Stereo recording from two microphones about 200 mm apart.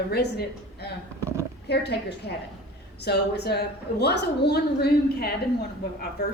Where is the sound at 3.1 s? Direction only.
55° left (ahead or behind).